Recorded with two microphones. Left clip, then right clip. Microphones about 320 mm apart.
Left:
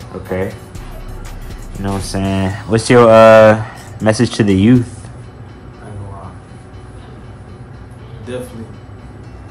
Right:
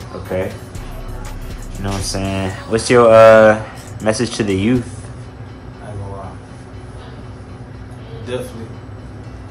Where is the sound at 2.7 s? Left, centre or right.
Left.